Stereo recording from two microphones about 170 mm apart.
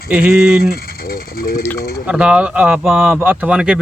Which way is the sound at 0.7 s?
60° left (ahead or behind).